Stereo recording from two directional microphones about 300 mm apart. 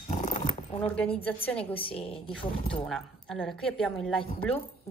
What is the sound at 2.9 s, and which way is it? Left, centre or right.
A woman's voice, centre.